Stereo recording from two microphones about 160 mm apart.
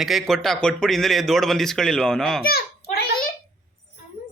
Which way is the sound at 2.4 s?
75° left (ahead or behind).